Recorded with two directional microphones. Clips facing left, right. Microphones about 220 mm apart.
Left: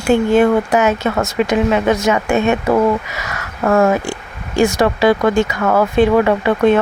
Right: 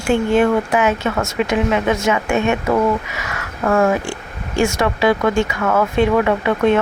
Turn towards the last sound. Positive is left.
turn(degrees=35)  # may be behind; listen again after turning